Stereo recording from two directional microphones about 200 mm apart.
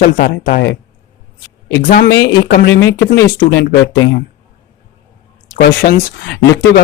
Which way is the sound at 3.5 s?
55° left (ahead or behind).